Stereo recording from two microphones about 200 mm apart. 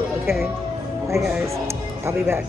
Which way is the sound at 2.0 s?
15° right (ahead or behind).